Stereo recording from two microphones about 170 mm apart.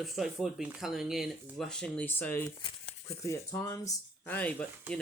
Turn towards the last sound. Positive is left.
turn(degrees=5)  # may be behind; listen again after turning